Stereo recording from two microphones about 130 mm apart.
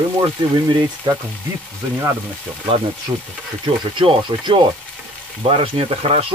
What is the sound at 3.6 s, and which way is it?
Speech, 40° right (ahead or behind).